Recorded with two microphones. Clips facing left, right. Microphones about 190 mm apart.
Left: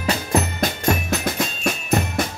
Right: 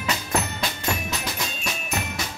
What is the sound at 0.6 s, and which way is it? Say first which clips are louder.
Drum: left 7 dB; 50° left (ahead or behind).